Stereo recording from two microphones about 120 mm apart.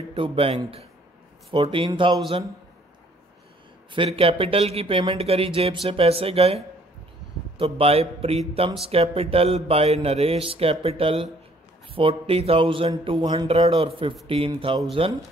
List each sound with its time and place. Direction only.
0.1 s speech: 50° right (ahead or behind)
3.9 s speech: 50° right (ahead or behind)
13.5 s speech: 50° right (ahead or behind)